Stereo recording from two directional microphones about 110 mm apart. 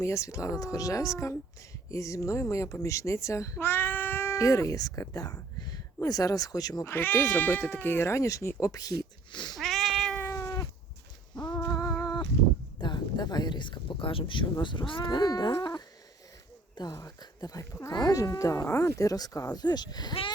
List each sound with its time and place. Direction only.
0.0 s speech: 30° left (ahead or behind)
6.9 s speech: 20° left (ahead or behind); by 9.6 s 40° left (ahead or behind)
9.6 s cat: centre (ahead or behind)
10.2 s cat: 20° left (ahead or behind)
11.3 s a sound: 40° left (ahead or behind)
11.7 s a sound: 30° left (ahead or behind)
12.8 s speech: 40° left (ahead or behind)
16.9 s speech: 30° left (ahead or behind)